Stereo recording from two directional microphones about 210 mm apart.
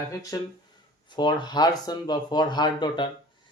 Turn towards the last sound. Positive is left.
turn(degrees=20)  # may be behind; listen again after turning